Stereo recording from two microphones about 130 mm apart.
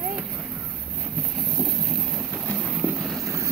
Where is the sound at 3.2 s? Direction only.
25° right (ahead or behind).